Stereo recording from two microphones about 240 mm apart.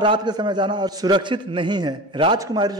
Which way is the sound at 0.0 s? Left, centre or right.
Centre.